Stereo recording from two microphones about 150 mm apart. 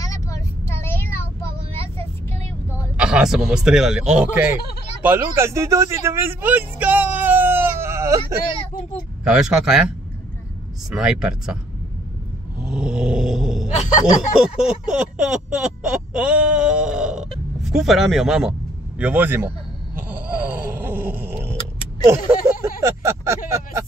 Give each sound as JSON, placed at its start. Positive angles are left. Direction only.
{"t": 0.0, "sound": "vehicle", "side_deg": 20}
{"t": 3.0, "sound": "speech", "side_deg": -5}
{"t": 9.2, "sound": "speech", "side_deg": -5}
{"t": 12.5, "sound": "speech", "side_deg": -5}
{"t": 13.7, "sound": "speech", "side_deg": 50}
{"t": 14.4, "sound": "speech", "side_deg": -5}
{"t": 20.0, "sound": "a sound", "side_deg": -10}
{"t": 22.0, "sound": "speech", "side_deg": -20}